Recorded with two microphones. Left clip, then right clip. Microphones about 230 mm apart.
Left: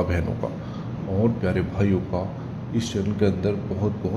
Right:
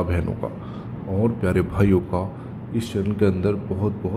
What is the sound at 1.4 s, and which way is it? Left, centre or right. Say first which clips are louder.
Speech: right 3 dB; right.